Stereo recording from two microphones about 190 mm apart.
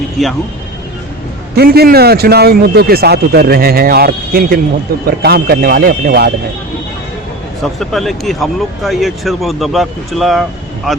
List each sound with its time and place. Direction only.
1.5 s speech: 55° right (ahead or behind)
7.6 s speech: centre (ahead or behind)